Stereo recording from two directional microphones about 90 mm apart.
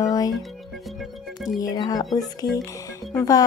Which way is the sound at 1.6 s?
45° left (ahead or behind).